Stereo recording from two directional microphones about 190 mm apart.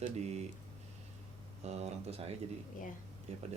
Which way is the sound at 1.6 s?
35° right (ahead or behind).